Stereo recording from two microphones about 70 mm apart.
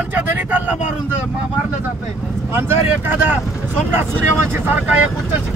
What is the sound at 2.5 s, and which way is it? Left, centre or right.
Speech, right.